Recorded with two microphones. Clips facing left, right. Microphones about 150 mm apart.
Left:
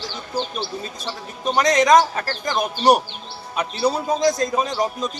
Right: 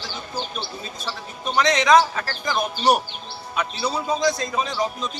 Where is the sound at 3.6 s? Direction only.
45° left (ahead or behind).